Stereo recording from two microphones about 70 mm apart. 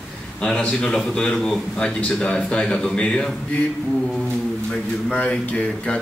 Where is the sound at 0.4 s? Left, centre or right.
Centre.